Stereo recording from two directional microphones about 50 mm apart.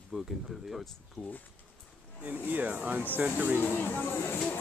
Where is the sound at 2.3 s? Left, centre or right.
Right.